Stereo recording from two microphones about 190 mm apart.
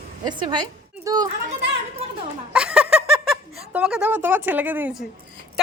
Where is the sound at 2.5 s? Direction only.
5° right (ahead or behind).